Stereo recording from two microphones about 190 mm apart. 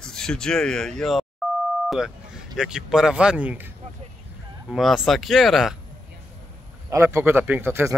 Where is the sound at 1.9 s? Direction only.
Centre (ahead or behind).